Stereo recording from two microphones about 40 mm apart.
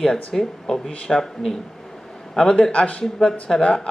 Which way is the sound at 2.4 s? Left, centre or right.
Left.